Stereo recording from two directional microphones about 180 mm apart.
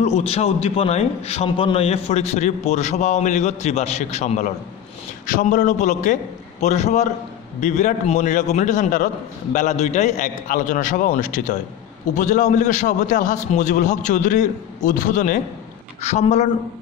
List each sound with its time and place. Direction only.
0.0 s a man's voice: 35° left (ahead or behind)